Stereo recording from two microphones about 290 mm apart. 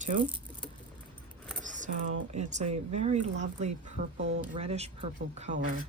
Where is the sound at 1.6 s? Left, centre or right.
Right.